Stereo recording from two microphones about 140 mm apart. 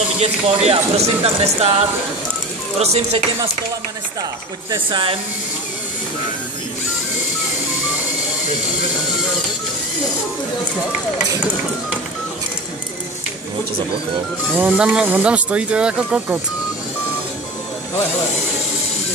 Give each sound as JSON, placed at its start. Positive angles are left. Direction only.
{"t": 0.2, "sound": "speech", "side_deg": -50}
{"t": 4.7, "sound": "speech", "side_deg": -40}
{"t": 14.6, "sound": "speech", "side_deg": -5}